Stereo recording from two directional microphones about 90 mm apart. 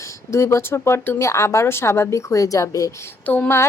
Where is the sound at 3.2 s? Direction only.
20° left (ahead or behind).